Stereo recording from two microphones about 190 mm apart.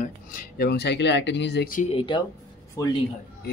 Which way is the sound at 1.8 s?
30° left (ahead or behind).